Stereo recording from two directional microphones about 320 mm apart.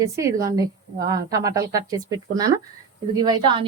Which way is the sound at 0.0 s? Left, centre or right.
Centre.